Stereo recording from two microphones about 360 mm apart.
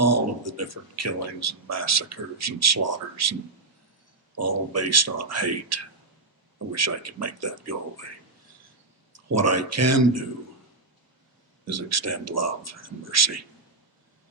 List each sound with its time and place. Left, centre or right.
0.0 s speech: right
4.4 s speech: right
9.1 s speech: right
11.6 s speech: right